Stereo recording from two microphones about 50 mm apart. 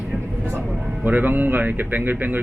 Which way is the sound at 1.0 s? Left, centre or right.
Right.